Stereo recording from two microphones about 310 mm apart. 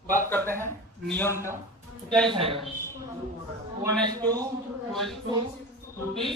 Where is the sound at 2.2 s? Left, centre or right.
Centre.